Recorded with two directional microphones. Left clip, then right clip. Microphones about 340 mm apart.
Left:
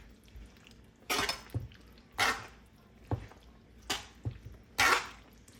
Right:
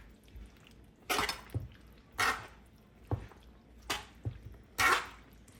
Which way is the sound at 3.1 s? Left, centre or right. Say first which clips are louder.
Left 1 dB; centre.